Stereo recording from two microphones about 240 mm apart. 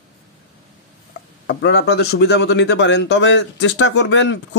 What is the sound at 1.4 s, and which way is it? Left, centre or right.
Speech, left.